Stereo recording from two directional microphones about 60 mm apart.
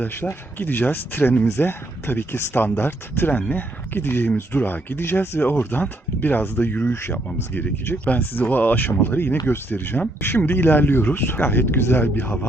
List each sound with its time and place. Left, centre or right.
0.0 s speech: left